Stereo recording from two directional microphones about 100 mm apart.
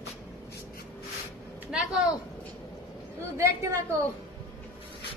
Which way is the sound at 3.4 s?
25° right (ahead or behind).